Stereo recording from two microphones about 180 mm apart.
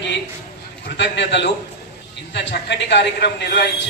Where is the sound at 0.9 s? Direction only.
75° left (ahead or behind).